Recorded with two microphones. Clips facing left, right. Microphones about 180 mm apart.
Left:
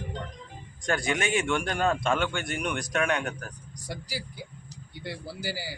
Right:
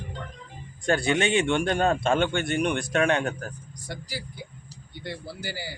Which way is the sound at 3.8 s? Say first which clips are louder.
Even; 10° left (ahead or behind).